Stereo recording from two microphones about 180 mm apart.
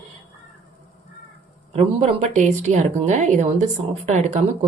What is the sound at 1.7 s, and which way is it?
A woman's voice, 35° right (ahead or behind).